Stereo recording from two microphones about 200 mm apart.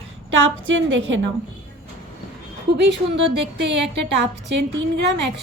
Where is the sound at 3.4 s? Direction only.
60° right (ahead or behind).